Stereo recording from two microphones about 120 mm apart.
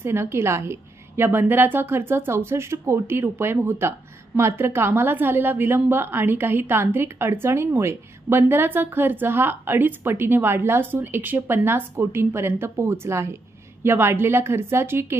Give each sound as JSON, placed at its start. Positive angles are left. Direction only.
{"t": 0.0, "sound": "a woman's voice", "side_deg": -20}